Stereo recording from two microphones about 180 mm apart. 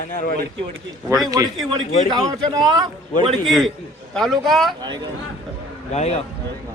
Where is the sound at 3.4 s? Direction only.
Centre (ahead or behind).